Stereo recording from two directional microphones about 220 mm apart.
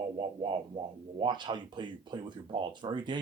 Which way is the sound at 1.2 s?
20° right (ahead or behind).